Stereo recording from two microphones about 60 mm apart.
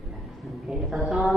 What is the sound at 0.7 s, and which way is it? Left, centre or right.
Speech, centre.